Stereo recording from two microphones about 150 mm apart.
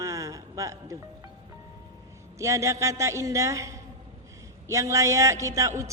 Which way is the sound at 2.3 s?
20° right (ahead or behind).